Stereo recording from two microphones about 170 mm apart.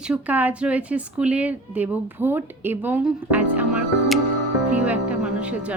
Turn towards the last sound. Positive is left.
turn(degrees=-5)  # may be behind; listen again after turning